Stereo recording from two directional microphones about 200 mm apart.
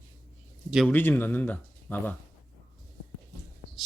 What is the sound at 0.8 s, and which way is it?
Speech, 10° left (ahead or behind).